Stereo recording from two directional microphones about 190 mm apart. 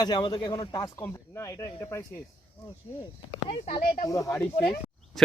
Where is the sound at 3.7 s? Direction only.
40° left (ahead or behind).